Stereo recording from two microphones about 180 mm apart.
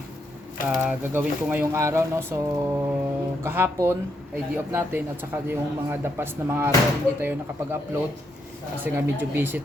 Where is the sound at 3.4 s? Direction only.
15° right (ahead or behind).